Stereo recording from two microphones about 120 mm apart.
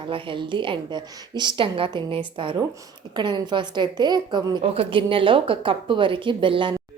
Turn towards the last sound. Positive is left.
turn(degrees=-45)  # may be behind; listen again after turning